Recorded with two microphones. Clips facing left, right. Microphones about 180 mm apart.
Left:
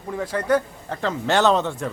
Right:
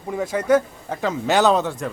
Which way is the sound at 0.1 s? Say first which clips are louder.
Right 3 dB; 15° right (ahead or behind).